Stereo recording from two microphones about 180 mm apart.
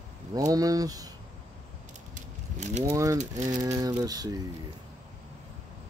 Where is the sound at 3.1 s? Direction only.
40° right (ahead or behind).